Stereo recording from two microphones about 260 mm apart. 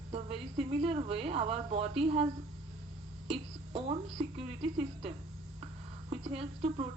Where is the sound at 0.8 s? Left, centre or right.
Right.